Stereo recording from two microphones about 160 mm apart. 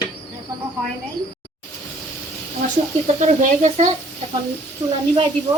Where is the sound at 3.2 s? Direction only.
45° right (ahead or behind).